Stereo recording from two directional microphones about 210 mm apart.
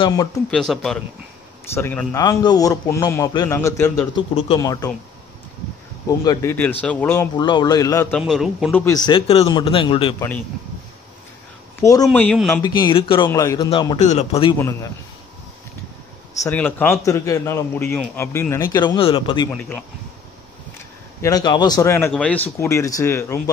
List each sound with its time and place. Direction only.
0.0 s a man's voice: 15° left (ahead or behind)
0.5 s a man's voice: centre (ahead or behind)
6.0 s a man's voice: 15° left (ahead or behind)
7.3 s a man's voice: 20° left (ahead or behind)
8.2 s speech: centre (ahead or behind)
8.7 s speech: 15° left (ahead or behind)
11.8 s a man's voice: 15° left (ahead or behind)
12.1 s speech: 5° left (ahead or behind)
12.6 s a man's voice: 20° left (ahead or behind)
16.4 s a man's voice: 10° left (ahead or behind)
21.2 s a man's voice: 20° left (ahead or behind)